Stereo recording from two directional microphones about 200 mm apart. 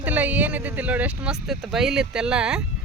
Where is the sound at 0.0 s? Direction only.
10° right (ahead or behind).